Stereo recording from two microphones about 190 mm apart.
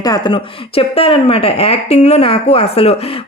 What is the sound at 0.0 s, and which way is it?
A woman's voice, 20° left (ahead or behind).